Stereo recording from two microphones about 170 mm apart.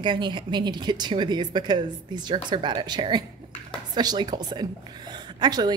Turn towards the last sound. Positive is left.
turn(degrees=-25)  # may be behind; listen again after turning